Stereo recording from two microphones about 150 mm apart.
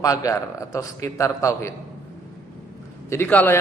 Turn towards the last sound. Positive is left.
turn(degrees=10)  # may be behind; listen again after turning